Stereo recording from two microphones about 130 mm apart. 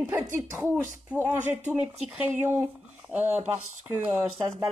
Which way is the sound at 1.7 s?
10° right (ahead or behind).